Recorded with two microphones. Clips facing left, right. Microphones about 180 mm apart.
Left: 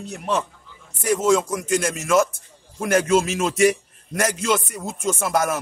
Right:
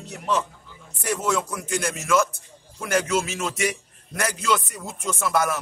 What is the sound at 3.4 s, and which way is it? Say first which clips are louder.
A man's voice: left 8 dB; 45° left (ahead or behind).